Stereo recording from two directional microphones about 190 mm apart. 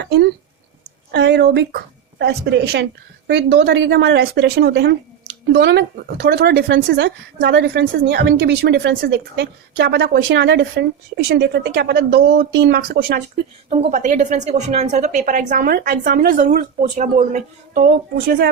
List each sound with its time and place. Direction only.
0.0 s a sound: 65° right (ahead or behind)
1.1 s speech: 60° right (ahead or behind)
13.7 s a woman's voice: 35° right (ahead or behind)